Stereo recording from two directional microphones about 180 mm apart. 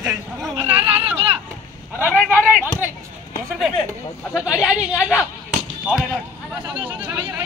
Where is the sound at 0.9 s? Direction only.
30° right (ahead or behind).